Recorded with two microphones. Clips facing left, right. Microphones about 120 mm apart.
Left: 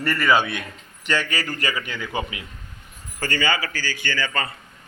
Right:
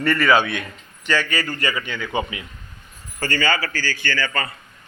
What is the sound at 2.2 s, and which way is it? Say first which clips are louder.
Speech: right 4 dB; 25° right (ahead or behind).